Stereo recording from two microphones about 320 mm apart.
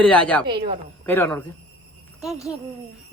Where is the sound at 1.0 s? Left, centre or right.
Centre.